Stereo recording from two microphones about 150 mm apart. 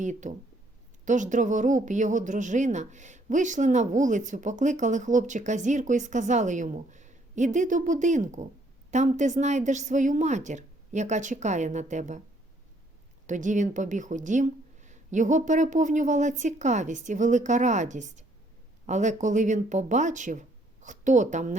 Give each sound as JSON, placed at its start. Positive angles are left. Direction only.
{"t": 0.0, "sound": "a woman's voice", "side_deg": -55}
{"t": 13.2, "sound": "a woman's voice", "side_deg": -55}